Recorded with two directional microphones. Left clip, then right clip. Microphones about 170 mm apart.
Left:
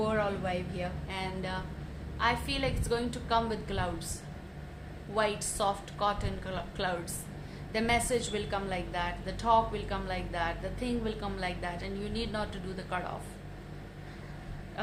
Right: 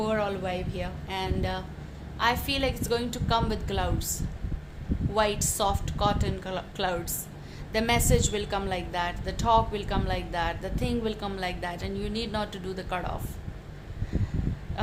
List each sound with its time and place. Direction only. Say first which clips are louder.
0.0 s a woman's voice: right 3 dB; 35° right (ahead or behind)
5.1 s a woman's voice: right 4 dB; 40° right (ahead or behind)